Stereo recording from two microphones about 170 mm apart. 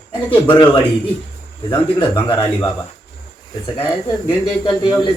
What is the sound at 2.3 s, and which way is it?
Speech, 10° left (ahead or behind).